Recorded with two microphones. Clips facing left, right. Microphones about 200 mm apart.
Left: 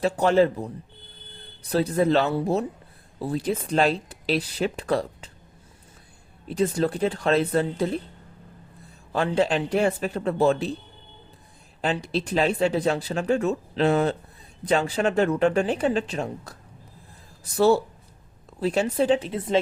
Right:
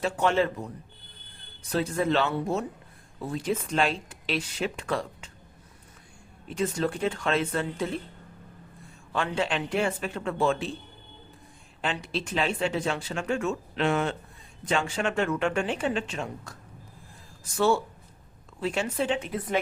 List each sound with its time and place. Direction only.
0.0 s speech: 35° left (ahead or behind)
6.5 s speech: 35° left (ahead or behind)
9.1 s speech: 35° left (ahead or behind)
11.8 s speech: 40° left (ahead or behind)